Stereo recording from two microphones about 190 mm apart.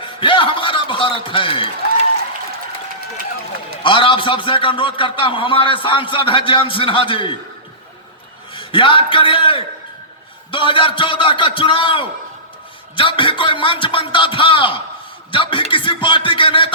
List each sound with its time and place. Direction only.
0.2 s a man's voice: 25° left (ahead or behind)
3.8 s a man's voice: 25° left (ahead or behind)
8.5 s a man's voice: 25° left (ahead or behind)